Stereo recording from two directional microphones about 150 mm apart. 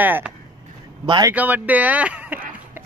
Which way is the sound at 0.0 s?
10° right (ahead or behind).